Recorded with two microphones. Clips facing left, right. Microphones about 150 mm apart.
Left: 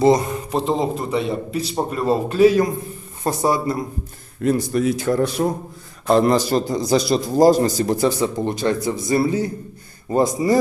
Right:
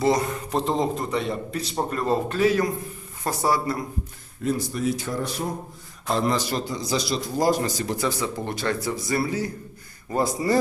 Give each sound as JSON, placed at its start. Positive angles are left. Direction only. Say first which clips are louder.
{"t": 0.5, "sound": "a man's voice", "louder": "left 3 dB", "side_deg": 5}
{"t": 4.4, "sound": "a man's voice", "louder": "left 6 dB", "side_deg": 70}
{"t": 6.3, "sound": "a man's voice", "louder": "left 8 dB", "side_deg": 40}
{"t": 7.4, "sound": "a man's voice", "louder": "left 9 dB", "side_deg": 35}
{"t": 8.4, "sound": "a man's voice", "louder": "left 6 dB", "side_deg": 20}